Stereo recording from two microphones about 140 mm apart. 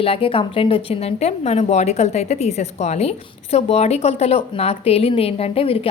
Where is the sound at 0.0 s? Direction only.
40° left (ahead or behind).